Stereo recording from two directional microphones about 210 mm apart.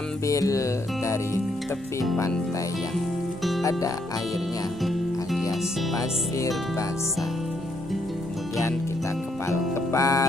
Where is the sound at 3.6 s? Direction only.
15° left (ahead or behind).